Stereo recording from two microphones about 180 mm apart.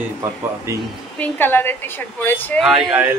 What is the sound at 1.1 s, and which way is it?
A woman's voice, 10° left (ahead or behind).